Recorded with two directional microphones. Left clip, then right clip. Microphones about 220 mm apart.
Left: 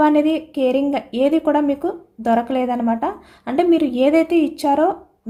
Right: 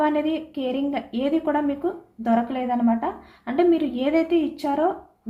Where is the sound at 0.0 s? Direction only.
50° left (ahead or behind).